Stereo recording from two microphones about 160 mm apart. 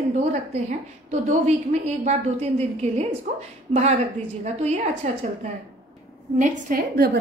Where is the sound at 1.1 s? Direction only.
45° right (ahead or behind).